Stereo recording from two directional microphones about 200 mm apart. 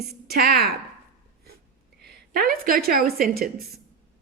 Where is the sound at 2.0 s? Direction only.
50° right (ahead or behind).